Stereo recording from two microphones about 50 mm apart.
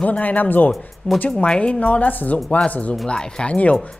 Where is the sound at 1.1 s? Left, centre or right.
Left.